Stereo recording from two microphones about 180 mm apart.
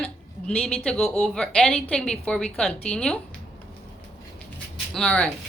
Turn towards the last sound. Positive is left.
turn(degrees=5)  # may be behind; listen again after turning